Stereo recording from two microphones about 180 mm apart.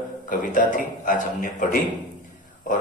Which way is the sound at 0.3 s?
45° left (ahead or behind).